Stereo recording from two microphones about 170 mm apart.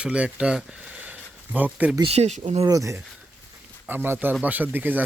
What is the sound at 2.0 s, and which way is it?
Speech, 35° right (ahead or behind).